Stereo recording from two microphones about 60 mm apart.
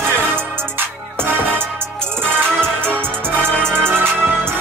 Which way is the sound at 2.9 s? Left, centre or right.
Right.